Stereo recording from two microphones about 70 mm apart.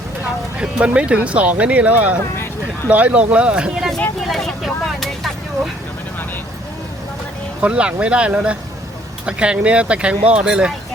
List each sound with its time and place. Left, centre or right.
0.6 s speech: centre
4.3 s vehicle: centre
7.6 s speech: centre